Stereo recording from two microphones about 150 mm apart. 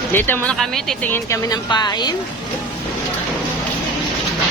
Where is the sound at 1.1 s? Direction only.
20° left (ahead or behind).